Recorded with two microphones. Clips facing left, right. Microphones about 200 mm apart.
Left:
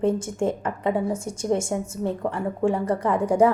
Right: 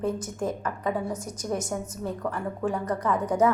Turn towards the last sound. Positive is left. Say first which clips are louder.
# left 4 dB
turn(degrees=30)  # may be behind; listen again after turning